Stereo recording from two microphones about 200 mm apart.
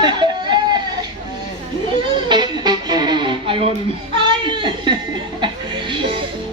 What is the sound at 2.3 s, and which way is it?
Music, 20° right (ahead or behind).